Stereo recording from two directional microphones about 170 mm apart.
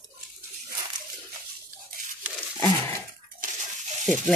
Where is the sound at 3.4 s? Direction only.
45° right (ahead or behind).